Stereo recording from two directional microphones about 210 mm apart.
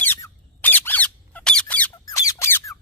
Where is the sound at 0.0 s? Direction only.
10° left (ahead or behind).